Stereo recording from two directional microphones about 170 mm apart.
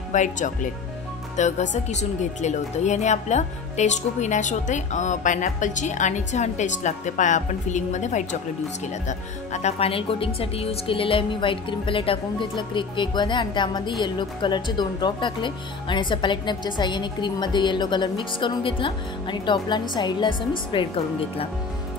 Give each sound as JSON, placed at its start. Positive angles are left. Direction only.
{"t": 0.1, "sound": "a woman's voice", "side_deg": 45}